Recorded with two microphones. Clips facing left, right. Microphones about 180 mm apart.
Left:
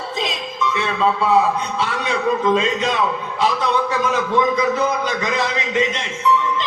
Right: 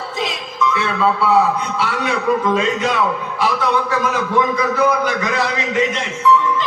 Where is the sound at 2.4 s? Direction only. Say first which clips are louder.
Even; 20° left (ahead or behind).